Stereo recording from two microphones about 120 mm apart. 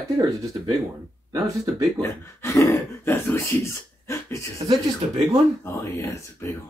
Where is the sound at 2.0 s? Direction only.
20° left (ahead or behind).